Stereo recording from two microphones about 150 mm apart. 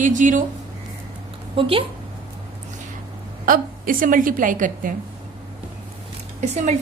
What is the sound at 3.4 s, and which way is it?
A woman's voice, 70° right (ahead or behind).